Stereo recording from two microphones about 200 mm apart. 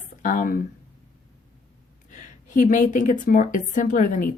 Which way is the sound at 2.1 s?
35° left (ahead or behind).